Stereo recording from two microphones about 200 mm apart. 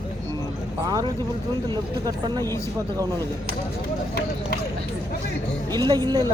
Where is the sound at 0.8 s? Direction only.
20° right (ahead or behind).